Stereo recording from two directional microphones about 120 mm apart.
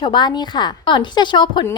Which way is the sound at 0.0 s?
40° left (ahead or behind).